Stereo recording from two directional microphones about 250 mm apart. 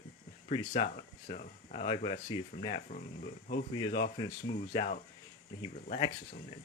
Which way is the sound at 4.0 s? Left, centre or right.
Centre.